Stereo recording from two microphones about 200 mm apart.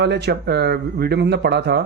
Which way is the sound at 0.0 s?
55° right (ahead or behind).